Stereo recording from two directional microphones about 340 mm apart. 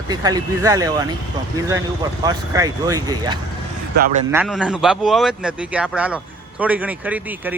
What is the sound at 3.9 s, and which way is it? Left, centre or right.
Speech, right.